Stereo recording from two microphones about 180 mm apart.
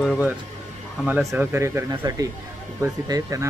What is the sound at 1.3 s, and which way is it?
Speech, 15° right (ahead or behind).